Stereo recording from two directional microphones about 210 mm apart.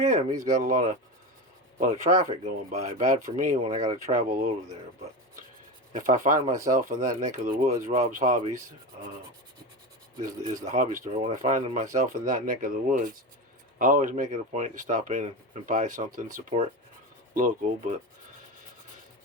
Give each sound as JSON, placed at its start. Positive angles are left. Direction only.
{"t": 0.0, "sound": "speech", "side_deg": -35}
{"t": 6.0, "sound": "speech", "side_deg": -40}
{"t": 10.2, "sound": "speech", "side_deg": -40}